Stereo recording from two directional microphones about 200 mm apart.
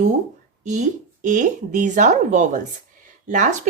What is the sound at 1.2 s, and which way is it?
Speech, 40° right (ahead or behind).